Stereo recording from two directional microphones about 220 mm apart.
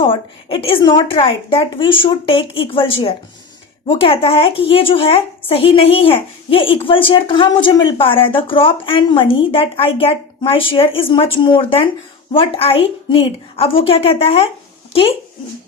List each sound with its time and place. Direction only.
0.0 s speech: 25° left (ahead or behind)